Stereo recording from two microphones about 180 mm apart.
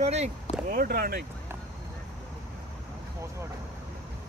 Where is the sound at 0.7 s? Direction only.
55° right (ahead or behind).